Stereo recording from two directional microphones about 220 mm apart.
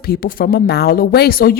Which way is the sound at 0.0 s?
40° left (ahead or behind).